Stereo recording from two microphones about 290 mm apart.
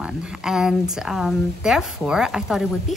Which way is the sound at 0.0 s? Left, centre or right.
Centre.